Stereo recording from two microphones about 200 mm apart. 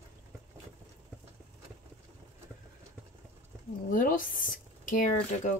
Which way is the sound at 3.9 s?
40° left (ahead or behind).